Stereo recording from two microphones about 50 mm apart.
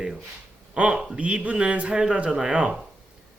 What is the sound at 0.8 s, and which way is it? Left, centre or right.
Speech, right.